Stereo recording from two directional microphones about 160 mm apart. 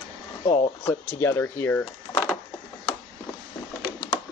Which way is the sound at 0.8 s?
15° left (ahead or behind).